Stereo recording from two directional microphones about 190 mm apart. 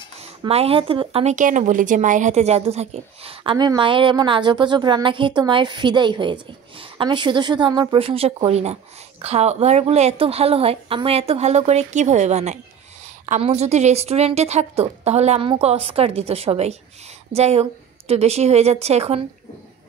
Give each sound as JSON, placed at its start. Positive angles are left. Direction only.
{"t": 0.5, "sound": "a woman's voice", "side_deg": -30}